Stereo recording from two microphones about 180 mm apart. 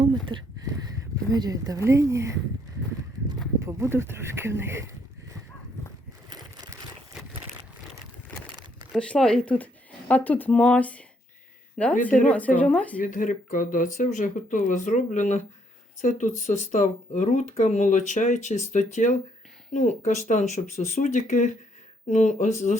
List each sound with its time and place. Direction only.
0.0 s speech: 25° right (ahead or behind)
3.6 s speech: 15° right (ahead or behind)
6.3 s crushing: 20° right (ahead or behind)
8.9 s speech: 5° left (ahead or behind)
12.5 s speech: 5° left (ahead or behind)
13.0 s speech: 45° left (ahead or behind)